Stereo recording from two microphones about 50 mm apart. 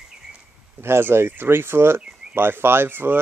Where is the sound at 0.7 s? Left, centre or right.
Right.